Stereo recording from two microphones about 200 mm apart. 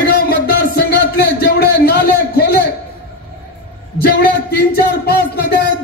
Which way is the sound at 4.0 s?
50° left (ahead or behind).